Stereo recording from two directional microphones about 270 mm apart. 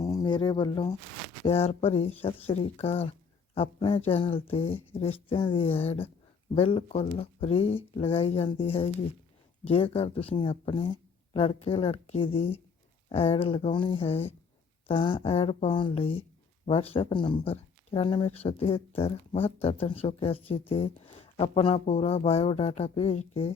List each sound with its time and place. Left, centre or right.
0.0 s speech: centre